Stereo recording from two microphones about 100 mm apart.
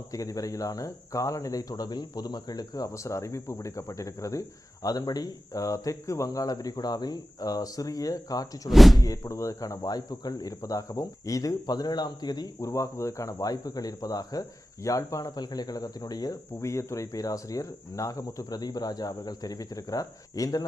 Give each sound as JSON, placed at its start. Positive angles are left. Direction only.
{"t": 0.1, "sound": "speech", "side_deg": 35}
{"t": 8.7, "sound": "speech", "side_deg": 0}
{"t": 9.0, "sound": "speech", "side_deg": 35}